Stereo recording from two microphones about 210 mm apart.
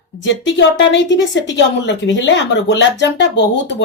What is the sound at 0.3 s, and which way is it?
Speech, 60° left (ahead or behind).